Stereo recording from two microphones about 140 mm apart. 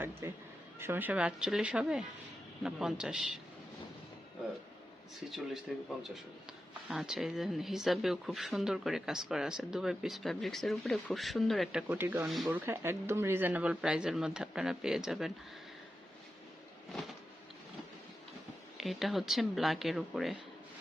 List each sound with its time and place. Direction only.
0.0 s speech: 15° right (ahead or behind)
5.7 s speech: centre (ahead or behind)
6.9 s speech: 5° right (ahead or behind)
18.8 s speech: centre (ahead or behind)